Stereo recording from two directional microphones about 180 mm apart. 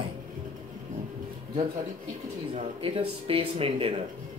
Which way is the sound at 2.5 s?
30° right (ahead or behind).